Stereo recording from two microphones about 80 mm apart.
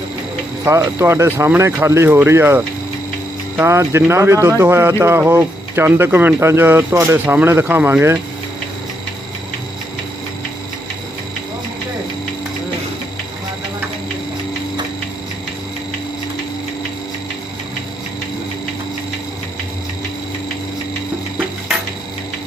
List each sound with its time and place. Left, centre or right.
0.6 s speech: right
3.7 s speech: right
6.4 s speech: right